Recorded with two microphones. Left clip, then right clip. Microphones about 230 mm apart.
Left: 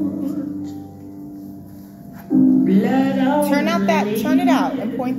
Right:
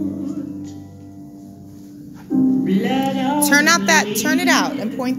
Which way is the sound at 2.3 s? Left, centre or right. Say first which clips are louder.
Left 2 dB; right.